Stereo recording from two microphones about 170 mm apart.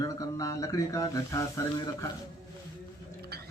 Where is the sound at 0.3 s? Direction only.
20° left (ahead or behind).